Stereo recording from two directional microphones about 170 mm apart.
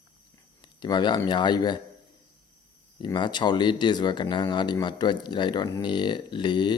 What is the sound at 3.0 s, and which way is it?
Speech, 25° left (ahead or behind).